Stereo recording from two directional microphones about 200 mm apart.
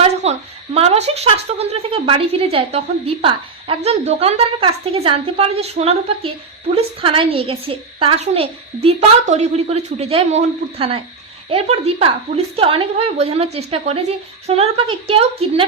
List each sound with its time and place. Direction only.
0.0 s a woman's voice: 30° right (ahead or behind)